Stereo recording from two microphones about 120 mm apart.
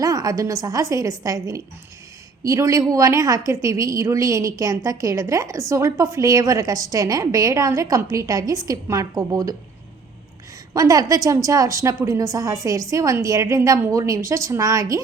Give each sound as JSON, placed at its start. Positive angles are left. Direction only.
{"t": 0.0, "sound": "a woman's voice", "side_deg": -30}
{"t": 10.8, "sound": "a woman's voice", "side_deg": -30}